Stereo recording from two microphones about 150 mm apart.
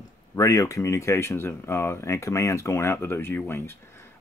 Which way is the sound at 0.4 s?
20° left (ahead or behind).